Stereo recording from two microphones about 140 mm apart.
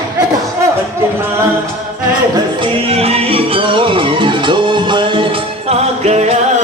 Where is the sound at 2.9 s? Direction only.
45° right (ahead or behind).